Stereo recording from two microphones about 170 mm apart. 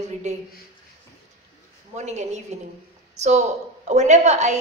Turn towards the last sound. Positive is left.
turn(degrees=-45)  # may be behind; listen again after turning